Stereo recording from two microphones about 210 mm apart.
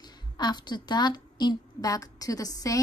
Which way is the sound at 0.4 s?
20° left (ahead or behind).